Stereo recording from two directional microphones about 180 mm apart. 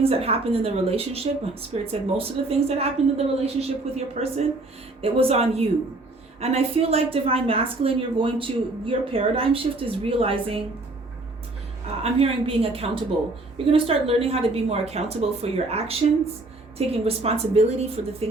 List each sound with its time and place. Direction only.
0.0 s a woman's voice: 35° right (ahead or behind)
12.0 s a woman's voice: 30° right (ahead or behind)